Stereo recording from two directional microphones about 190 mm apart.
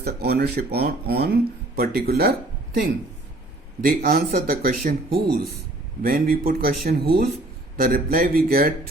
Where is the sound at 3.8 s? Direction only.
50° right (ahead or behind).